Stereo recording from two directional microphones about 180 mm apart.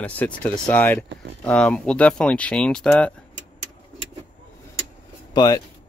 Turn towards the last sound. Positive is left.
turn(degrees=25)  # may be behind; listen again after turning